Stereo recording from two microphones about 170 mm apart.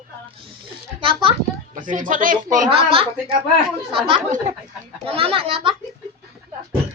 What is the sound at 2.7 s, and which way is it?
Speech, 35° right (ahead or behind).